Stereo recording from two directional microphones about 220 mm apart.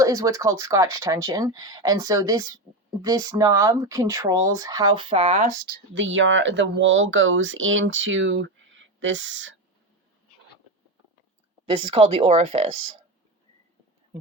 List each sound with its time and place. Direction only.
0.0 s speech: 15° right (ahead or behind); by 5.8 s 35° right (ahead or behind)
5.9 s speech: 55° right (ahead or behind)
11.6 s speech: 25° right (ahead or behind)